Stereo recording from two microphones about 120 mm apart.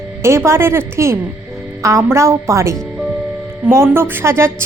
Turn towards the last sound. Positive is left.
turn(degrees=-20)  # may be behind; listen again after turning